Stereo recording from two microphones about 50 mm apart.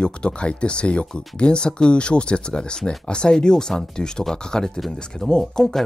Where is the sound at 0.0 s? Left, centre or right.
Left.